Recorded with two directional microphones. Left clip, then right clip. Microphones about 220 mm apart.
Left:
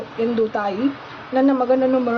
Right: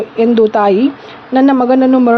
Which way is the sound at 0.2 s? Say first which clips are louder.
Right 11 dB; 40° right (ahead or behind).